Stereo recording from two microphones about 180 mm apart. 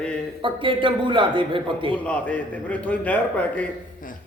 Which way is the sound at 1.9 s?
5° left (ahead or behind).